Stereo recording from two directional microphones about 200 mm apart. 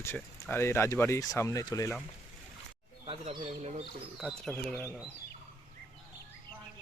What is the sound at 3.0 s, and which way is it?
Speech, 25° right (ahead or behind).